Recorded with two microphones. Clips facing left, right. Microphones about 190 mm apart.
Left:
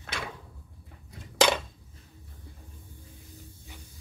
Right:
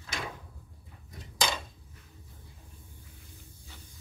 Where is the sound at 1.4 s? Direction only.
70° left (ahead or behind).